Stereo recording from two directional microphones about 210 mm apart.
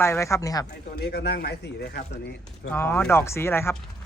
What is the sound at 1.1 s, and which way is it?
Speech, 50° left (ahead or behind).